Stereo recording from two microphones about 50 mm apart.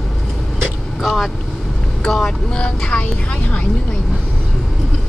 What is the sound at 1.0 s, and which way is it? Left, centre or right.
Vehicle, centre.